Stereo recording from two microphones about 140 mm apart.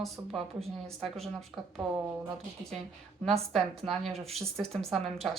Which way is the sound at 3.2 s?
Centre (ahead or behind).